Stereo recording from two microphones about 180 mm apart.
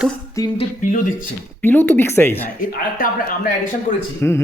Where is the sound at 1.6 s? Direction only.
10° left (ahead or behind).